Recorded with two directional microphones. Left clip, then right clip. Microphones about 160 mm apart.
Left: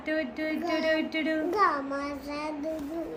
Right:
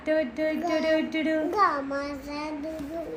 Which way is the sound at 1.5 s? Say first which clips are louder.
Right 1 dB; 15° left (ahead or behind).